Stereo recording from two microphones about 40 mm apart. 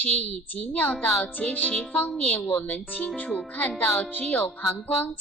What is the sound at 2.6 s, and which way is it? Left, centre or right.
A woman's voice, left.